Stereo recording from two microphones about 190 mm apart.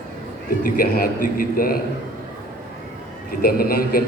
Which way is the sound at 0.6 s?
50° left (ahead or behind).